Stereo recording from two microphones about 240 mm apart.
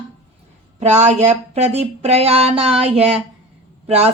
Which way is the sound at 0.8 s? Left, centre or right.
Right.